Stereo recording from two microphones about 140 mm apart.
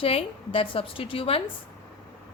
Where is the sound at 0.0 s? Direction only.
40° left (ahead or behind).